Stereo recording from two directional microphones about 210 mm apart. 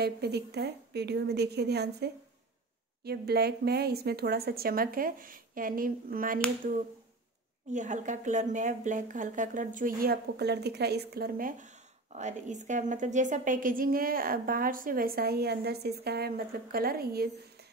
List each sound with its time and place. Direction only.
0.0 s speech: 50° right (ahead or behind)
7.7 s speech: 35° right (ahead or behind)